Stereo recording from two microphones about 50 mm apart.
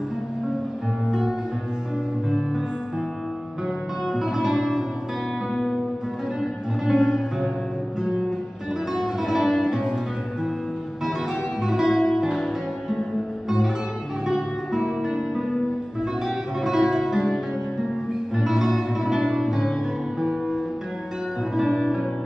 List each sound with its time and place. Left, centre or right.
4.1 s music: centre
6.9 s music: centre
11.6 s music: centre
14.2 s music: centre
16.6 s music: centre
21.5 s music: centre